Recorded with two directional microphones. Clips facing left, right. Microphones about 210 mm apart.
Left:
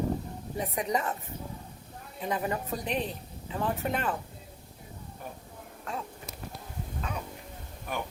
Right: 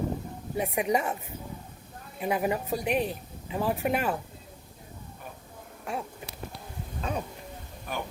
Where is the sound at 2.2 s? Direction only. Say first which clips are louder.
Right 4 dB; 10° right (ahead or behind).